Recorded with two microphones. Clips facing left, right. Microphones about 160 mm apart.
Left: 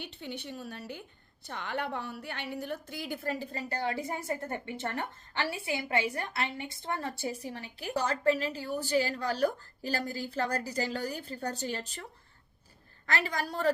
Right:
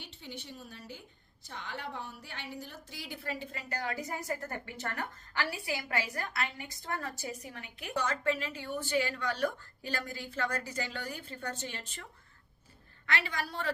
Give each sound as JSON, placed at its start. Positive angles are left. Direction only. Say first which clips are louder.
{"t": 0.0, "sound": "a woman's voice", "louder": "left 6 dB", "side_deg": 60}
{"t": 13.1, "sound": "a woman's voice", "louder": "left 3 dB", "side_deg": 40}